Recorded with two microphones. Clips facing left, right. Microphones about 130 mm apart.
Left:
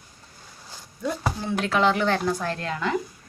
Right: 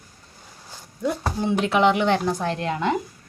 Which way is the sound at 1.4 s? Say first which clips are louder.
Right 4 dB; 20° right (ahead or behind).